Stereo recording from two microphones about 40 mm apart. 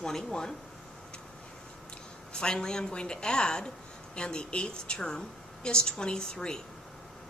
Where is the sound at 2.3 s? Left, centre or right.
Centre.